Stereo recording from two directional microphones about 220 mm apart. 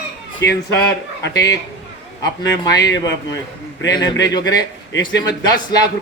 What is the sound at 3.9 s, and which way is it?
Speech, 20° left (ahead or behind).